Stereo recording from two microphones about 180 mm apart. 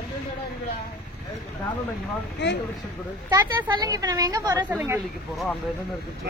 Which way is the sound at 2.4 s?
75° left (ahead or behind).